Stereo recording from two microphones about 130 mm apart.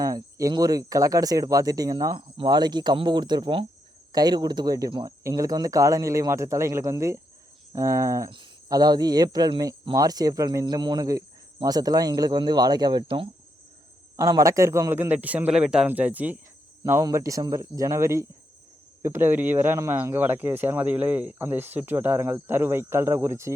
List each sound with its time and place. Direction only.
0.0 s speech: 25° right (ahead or behind)
2.1 s speech: 40° right (ahead or behind)
14.2 s speech: 25° right (ahead or behind)
16.8 s speech: 20° right (ahead or behind)